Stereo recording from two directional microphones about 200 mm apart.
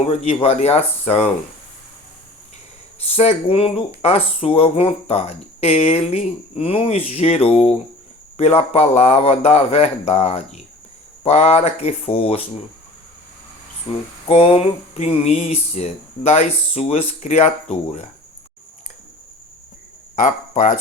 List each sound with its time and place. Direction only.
0.4 s speech: 30° left (ahead or behind)
3.0 s speech: 30° left (ahead or behind)
13.9 s speech: 25° left (ahead or behind)
20.1 s speech: 40° left (ahead or behind)